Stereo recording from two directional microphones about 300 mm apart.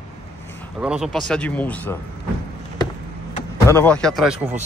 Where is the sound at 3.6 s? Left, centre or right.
Centre.